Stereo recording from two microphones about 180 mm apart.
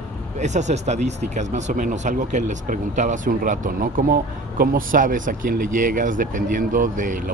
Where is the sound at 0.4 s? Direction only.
40° right (ahead or behind).